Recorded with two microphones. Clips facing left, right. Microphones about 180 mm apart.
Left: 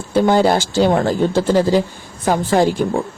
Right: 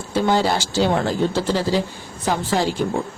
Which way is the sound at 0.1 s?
50° left (ahead or behind).